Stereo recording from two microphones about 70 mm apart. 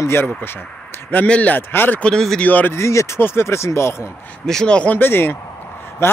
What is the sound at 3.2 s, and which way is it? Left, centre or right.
Speech, left.